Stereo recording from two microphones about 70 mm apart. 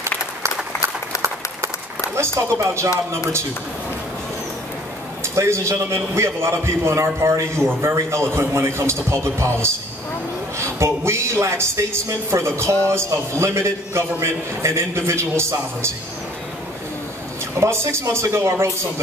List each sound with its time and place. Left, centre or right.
2.1 s speech: right
5.2 s a man's voice: right
17.6 s a man's voice: right